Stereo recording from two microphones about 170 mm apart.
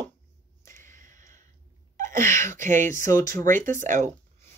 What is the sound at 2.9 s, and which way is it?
Speech, 20° left (ahead or behind).